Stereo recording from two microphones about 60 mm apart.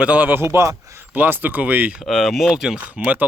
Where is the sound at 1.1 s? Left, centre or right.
Right.